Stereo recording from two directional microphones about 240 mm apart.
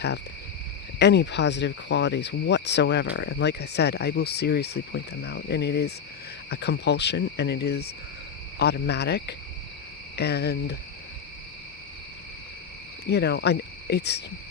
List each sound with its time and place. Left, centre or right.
0.9 s speech: left
13.1 s speech: left